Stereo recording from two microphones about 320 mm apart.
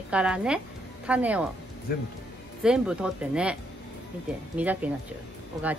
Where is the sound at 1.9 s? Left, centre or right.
Left.